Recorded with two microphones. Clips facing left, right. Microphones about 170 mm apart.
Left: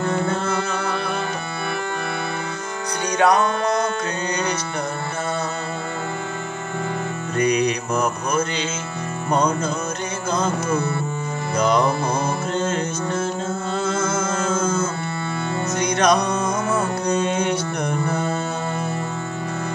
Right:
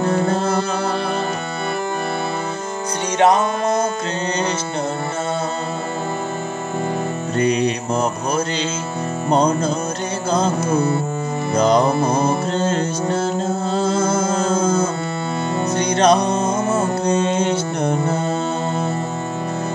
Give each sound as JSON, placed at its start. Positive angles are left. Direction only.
{"t": 0.0, "sound": "music", "side_deg": -35}
{"t": 3.2, "sound": "music", "side_deg": -25}
{"t": 7.3, "sound": "music", "side_deg": -30}
{"t": 11.5, "sound": "music", "side_deg": -35}